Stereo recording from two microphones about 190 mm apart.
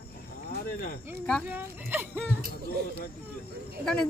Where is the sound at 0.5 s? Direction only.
50° left (ahead or behind).